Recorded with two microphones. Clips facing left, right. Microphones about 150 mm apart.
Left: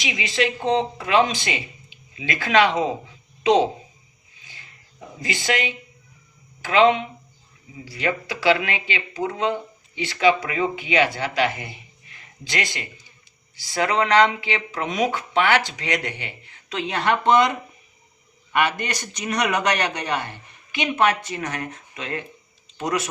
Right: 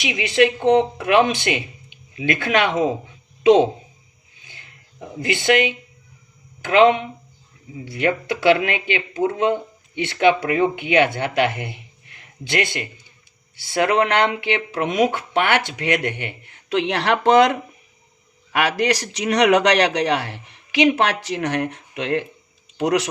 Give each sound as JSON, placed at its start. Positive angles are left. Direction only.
{"t": 0.0, "sound": "speech", "side_deg": -60}
{"t": 4.4, "sound": "a sound", "side_deg": -60}
{"t": 6.6, "sound": "a man's voice", "side_deg": -55}
{"t": 21.2, "sound": "speech", "side_deg": -75}